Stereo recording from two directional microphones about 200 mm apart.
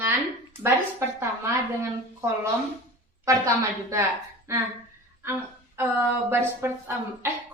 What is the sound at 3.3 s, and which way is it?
Speech, 15° right (ahead or behind).